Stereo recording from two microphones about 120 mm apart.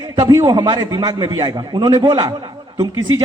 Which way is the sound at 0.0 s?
35° right (ahead or behind).